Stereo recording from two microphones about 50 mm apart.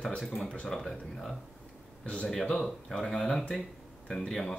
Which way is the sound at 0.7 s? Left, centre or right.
Centre.